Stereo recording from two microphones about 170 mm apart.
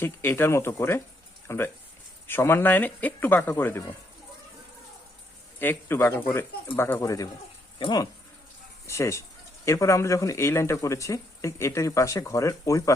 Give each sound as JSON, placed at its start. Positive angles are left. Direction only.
{"t": 0.0, "sound": "speech", "side_deg": 10}
{"t": 5.5, "sound": "speech", "side_deg": 15}
{"t": 8.9, "sound": "speech", "side_deg": 15}